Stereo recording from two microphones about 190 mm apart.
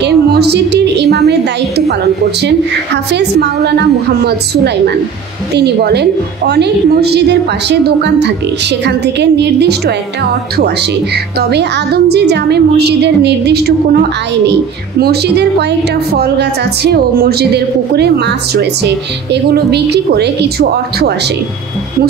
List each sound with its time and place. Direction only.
0.0 s a sound: 60° right (ahead or behind)
3.1 s speech: 60° right (ahead or behind)
11.5 s speech: 60° right (ahead or behind)